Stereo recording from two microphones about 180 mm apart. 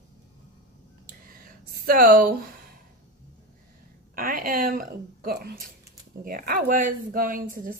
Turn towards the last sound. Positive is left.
turn(degrees=-50)  # may be behind; listen again after turning